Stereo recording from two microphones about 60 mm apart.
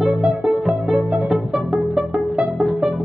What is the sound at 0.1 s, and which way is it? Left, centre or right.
Music, centre.